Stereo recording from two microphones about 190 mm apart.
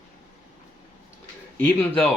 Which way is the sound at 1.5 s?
5° left (ahead or behind).